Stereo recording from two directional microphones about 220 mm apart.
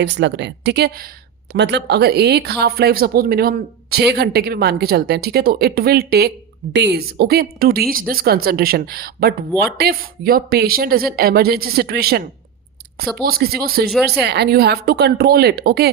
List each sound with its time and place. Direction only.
0.0 s speech: 55° right (ahead or behind)
13.2 s speech: 45° right (ahead or behind)